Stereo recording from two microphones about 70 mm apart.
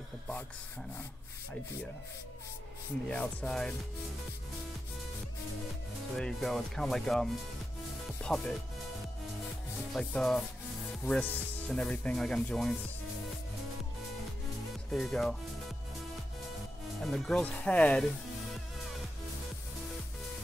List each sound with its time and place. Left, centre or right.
3.1 s speech: centre
6.1 s speech: centre
8.3 s speech: centre
9.9 s speech: centre
11.1 s speech: left
14.9 s speech: centre
17.0 s speech: centre
17.4 s speech: centre